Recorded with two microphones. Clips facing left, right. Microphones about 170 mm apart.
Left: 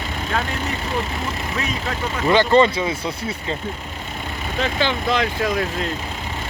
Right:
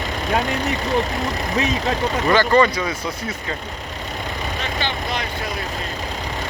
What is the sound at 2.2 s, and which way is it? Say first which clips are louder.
Speech: left 2 dB; 20° left (ahead or behind).